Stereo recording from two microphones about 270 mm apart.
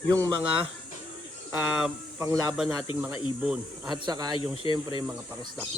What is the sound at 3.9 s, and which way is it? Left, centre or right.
Speech, centre.